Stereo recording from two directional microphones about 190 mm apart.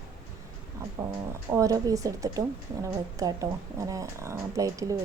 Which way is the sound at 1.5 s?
15° right (ahead or behind).